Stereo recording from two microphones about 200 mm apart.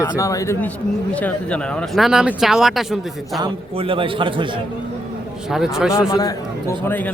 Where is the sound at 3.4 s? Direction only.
25° right (ahead or behind).